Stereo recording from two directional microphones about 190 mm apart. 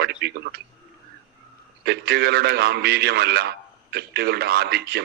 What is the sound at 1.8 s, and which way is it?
A man's voice, 60° right (ahead or behind).